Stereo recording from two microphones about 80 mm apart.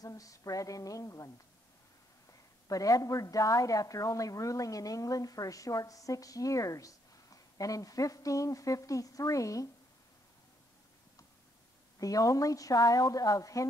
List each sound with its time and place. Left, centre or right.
0.0 s a woman's voice: left
2.7 s a woman's voice: left
12.0 s a woman's voice: left